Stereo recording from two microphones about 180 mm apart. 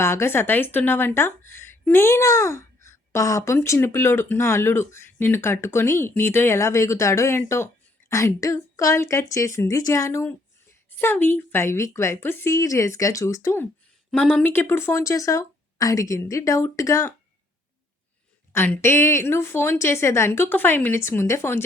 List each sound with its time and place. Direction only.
0.0 s a woman's voice: 15° left (ahead or behind)
14.1 s a woman's voice: 5° left (ahead or behind)
18.5 s a woman's voice: 10° left (ahead or behind)